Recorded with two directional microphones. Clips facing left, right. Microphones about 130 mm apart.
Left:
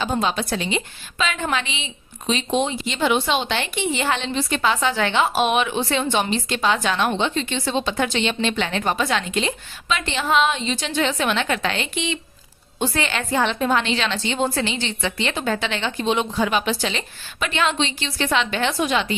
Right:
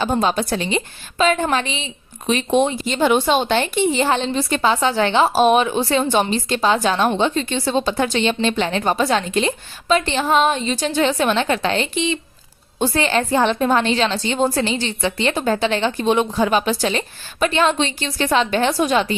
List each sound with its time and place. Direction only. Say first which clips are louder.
0.0 s speech: right 4 dB; 45° right (ahead or behind)
2.2 s speech: right 5 dB; 55° right (ahead or behind)